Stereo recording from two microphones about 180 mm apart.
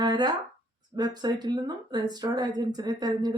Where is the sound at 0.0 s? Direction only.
25° right (ahead or behind).